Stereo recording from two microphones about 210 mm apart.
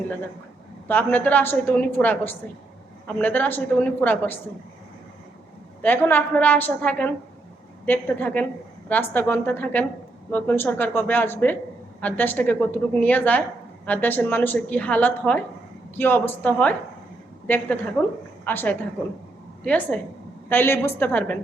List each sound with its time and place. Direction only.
0.9 s a woman's voice: 10° left (ahead or behind)
5.8 s a woman's voice: 10° left (ahead or behind)